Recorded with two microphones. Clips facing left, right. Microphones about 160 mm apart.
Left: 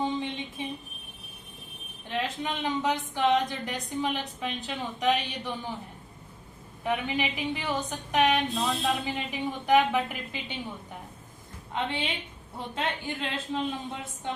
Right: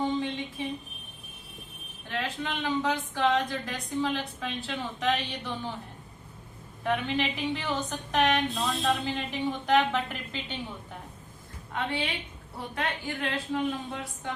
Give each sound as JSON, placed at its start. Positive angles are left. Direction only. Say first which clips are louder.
{"t": 0.0, "sound": "a sound", "louder": "right 1 dB", "side_deg": 20}
{"t": 2.0, "sound": "a woman's voice", "louder": "left 2 dB", "side_deg": 20}
{"t": 6.8, "sound": "a woman's voice", "louder": "right 1 dB", "side_deg": 10}
{"t": 11.7, "sound": "a woman's voice", "louder": "even", "side_deg": 20}